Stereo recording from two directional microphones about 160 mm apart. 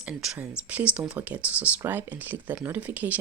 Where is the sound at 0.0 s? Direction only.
5° right (ahead or behind).